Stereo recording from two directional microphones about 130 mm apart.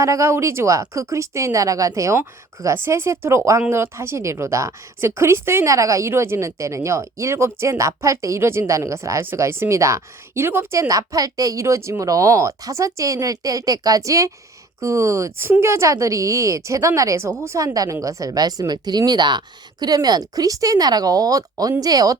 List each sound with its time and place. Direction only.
0.0 s a woman's voice: 25° right (ahead or behind)